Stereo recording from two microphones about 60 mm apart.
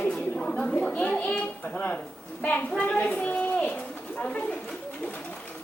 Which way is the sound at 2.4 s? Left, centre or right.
Left.